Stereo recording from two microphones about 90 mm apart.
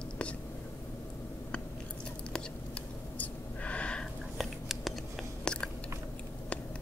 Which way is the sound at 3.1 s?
15° left (ahead or behind).